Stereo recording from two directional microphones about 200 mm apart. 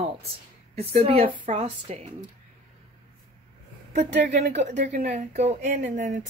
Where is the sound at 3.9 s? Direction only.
35° right (ahead or behind).